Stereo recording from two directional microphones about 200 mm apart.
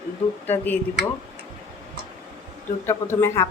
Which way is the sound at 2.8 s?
10° left (ahead or behind).